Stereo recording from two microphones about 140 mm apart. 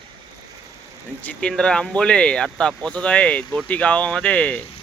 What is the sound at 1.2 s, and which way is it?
Speech, 10° left (ahead or behind).